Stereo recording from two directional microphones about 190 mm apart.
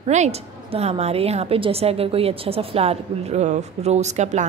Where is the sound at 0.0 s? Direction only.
35° right (ahead or behind).